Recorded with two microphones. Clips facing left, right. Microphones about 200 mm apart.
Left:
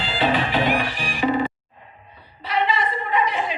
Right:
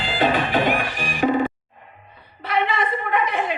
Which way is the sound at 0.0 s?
50° right (ahead or behind).